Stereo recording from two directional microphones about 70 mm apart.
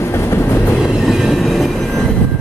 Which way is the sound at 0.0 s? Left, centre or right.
Left.